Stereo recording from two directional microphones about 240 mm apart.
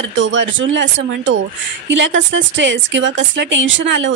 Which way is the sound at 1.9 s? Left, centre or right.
Right.